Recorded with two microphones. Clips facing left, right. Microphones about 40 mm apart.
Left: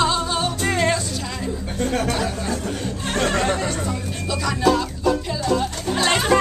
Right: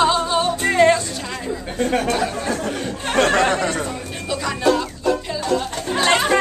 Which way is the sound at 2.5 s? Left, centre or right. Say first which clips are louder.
Right 2 dB; right.